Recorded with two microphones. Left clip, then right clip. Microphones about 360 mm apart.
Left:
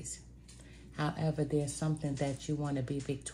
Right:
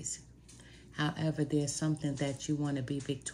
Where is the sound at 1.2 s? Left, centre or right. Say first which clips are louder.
Left 1 dB; centre.